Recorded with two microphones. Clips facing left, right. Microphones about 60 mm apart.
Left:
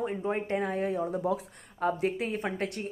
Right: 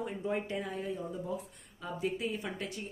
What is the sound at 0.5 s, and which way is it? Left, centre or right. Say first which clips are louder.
Speech: left 8 dB; left.